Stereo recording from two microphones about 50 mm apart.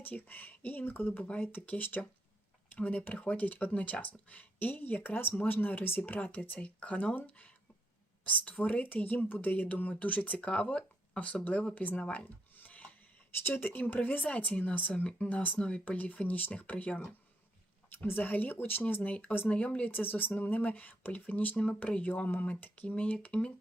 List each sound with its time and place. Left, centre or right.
0.0 s speech: left
6.2 s speech: left
12.0 s speech: centre
12.5 s a sound: left
13.4 s speech: left
14.3 s speech: left
15.5 s speech: centre
15.8 s speech: left
18.0 s speech: left
19.5 s speech: left
22.3 s speech: left